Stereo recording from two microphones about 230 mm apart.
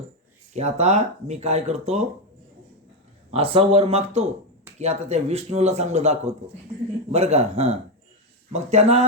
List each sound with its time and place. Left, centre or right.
0.5 s speech: right
3.3 s speech: right